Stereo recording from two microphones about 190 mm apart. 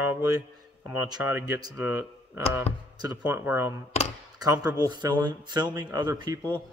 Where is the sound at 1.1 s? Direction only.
20° right (ahead or behind).